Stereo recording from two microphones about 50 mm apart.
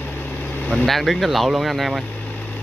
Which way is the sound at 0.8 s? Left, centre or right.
Centre.